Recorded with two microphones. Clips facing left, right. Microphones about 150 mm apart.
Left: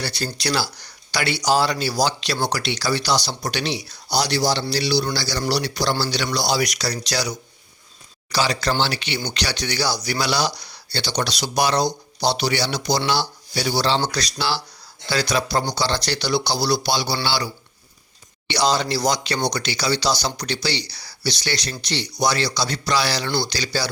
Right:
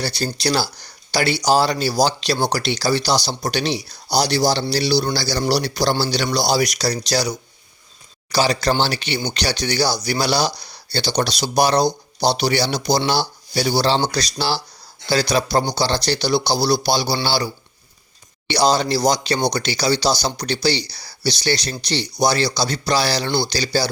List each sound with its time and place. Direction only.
0.4 s speech: 35° right (ahead or behind)
18.4 s speech: 35° right (ahead or behind)
23.2 s speech: 25° right (ahead or behind)
23.5 s speech: 35° right (ahead or behind)